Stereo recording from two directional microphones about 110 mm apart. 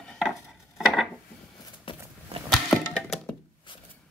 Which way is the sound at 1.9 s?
50° left (ahead or behind).